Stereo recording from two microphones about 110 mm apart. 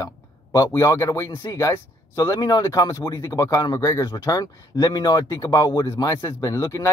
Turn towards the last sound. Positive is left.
turn(degrees=30)  # may be behind; listen again after turning